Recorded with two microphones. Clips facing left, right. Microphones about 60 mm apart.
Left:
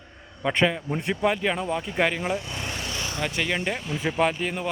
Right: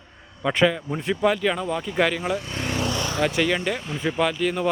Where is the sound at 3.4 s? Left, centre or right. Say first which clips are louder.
Right 3 dB; centre.